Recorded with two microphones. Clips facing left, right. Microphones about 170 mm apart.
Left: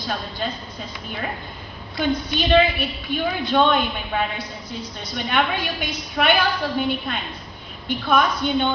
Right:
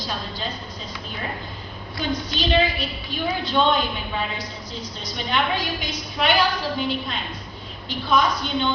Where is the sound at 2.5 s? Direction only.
55° left (ahead or behind).